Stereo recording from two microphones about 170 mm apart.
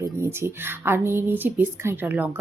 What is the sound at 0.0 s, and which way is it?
Speech, 15° right (ahead or behind).